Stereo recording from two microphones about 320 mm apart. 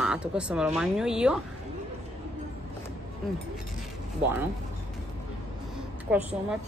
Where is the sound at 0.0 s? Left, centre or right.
Centre.